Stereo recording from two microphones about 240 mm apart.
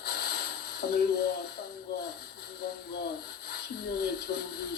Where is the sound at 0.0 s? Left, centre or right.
Left.